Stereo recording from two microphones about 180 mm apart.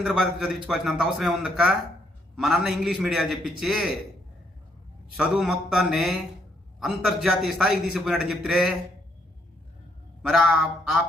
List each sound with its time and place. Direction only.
0.0 s a man's voice: 5° right (ahead or behind)
5.1 s a man's voice: 5° right (ahead or behind)
10.2 s a man's voice: 5° right (ahead or behind)